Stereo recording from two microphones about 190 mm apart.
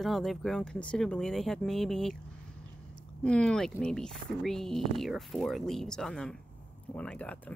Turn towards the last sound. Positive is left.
turn(degrees=5)  # may be behind; listen again after turning